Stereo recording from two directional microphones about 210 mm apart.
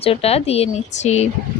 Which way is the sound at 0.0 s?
30° left (ahead or behind).